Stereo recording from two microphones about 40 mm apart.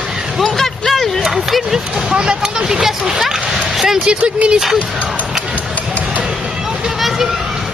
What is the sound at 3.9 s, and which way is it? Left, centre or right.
Speech, right.